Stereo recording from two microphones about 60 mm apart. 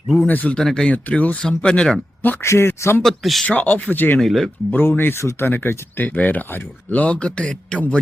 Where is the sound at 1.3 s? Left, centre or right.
Centre.